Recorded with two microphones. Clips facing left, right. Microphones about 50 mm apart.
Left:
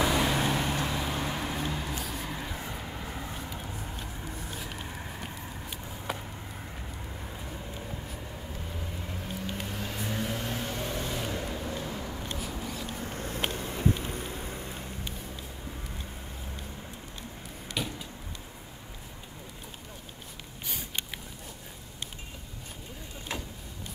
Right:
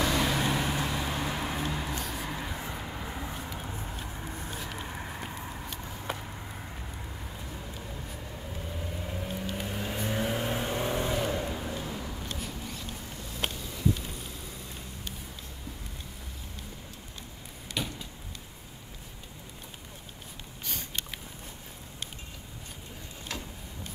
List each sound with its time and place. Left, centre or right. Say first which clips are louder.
0.0 s vehicle: left 1 dB; centre
7.3 s vehicle: left 1 dB; centre
13.0 s a sound: left 6 dB; left
13.5 s vehicle: left 1 dB; left
17.7 s vehicle: even; centre